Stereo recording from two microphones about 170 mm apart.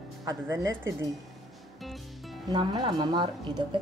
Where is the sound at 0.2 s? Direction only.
20° right (ahead or behind).